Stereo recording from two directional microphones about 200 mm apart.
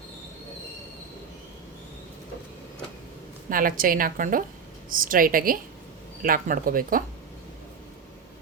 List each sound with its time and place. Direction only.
3.5 s a woman's voice: 45° right (ahead or behind)